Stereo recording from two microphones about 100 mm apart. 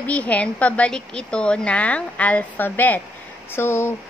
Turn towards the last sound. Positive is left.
turn(degrees=25)  # may be behind; listen again after turning